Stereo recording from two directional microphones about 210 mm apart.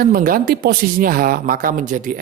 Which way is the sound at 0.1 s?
40° right (ahead or behind).